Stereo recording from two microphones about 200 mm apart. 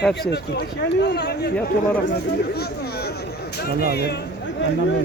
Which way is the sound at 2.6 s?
50° left (ahead or behind).